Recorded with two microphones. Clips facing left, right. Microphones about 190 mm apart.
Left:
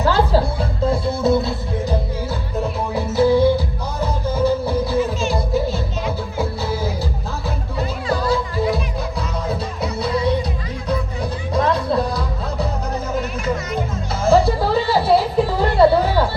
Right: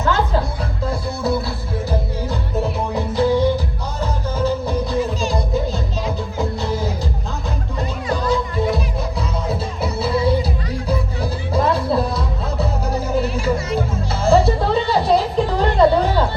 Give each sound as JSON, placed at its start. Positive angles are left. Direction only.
{"t": 0.0, "sound": "music", "side_deg": 35}
{"t": 2.9, "sound": "music", "side_deg": 10}
{"t": 6.4, "sound": "music", "side_deg": 5}
{"t": 9.8, "sound": "music", "side_deg": -5}
{"t": 13.1, "sound": "music", "side_deg": -30}
{"t": 14.3, "sound": "music", "side_deg": 0}